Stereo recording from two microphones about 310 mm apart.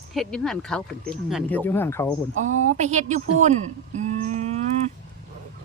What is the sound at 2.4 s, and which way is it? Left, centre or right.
Speech, right.